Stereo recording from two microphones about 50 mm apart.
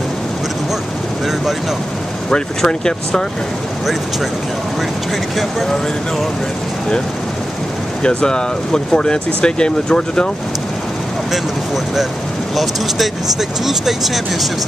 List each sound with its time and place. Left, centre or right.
2.6 s speech: centre
8.0 s speech: centre
11.3 s speech: centre